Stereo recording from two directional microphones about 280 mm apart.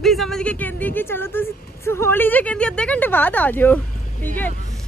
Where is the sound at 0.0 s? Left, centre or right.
Centre.